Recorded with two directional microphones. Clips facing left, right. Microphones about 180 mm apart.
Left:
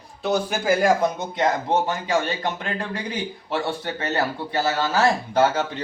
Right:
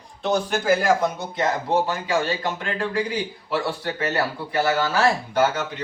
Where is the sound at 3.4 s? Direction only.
25° left (ahead or behind).